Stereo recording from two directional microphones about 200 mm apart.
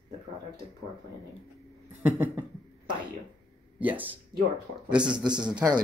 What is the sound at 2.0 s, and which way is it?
Speech, 5° right (ahead or behind).